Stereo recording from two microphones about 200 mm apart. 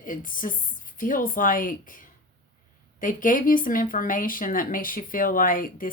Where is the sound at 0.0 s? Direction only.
40° left (ahead or behind).